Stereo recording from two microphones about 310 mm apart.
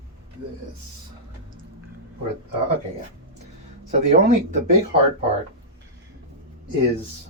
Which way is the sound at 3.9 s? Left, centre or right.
Right.